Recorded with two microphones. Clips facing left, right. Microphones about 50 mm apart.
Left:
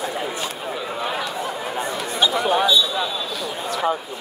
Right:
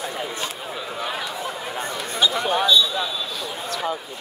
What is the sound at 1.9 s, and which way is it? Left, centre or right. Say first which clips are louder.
Chatter: left 1 dB; centre.